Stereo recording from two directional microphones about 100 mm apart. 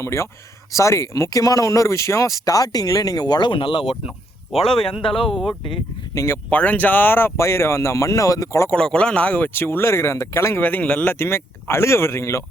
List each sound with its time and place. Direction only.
0.0 s speech: 25° left (ahead or behind); by 5.8 s 55° left (ahead or behind)
6.1 s speech: 25° left (ahead or behind)
6.5 s speech: 15° left (ahead or behind); by 8.7 s 30° left (ahead or behind)
8.7 s speech: 10° left (ahead or behind); by 12.5 s 30° left (ahead or behind)